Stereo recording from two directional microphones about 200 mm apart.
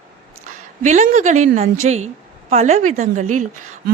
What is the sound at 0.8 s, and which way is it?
A woman's voice, 35° right (ahead or behind).